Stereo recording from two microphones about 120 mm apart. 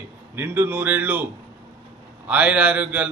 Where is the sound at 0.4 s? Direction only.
15° right (ahead or behind).